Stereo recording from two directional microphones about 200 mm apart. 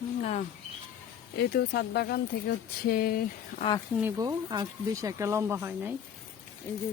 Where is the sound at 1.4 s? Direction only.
55° left (ahead or behind).